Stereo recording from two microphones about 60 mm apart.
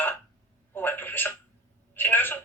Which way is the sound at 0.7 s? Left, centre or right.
Left.